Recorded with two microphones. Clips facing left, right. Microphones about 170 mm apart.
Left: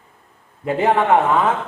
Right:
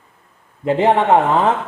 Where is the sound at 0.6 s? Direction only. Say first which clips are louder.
Right 3 dB; 25° right (ahead or behind).